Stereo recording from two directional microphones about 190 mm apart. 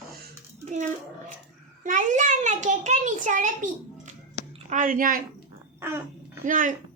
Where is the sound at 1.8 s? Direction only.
40° right (ahead or behind).